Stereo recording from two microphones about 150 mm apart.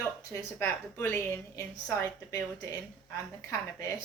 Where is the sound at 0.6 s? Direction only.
15° left (ahead or behind).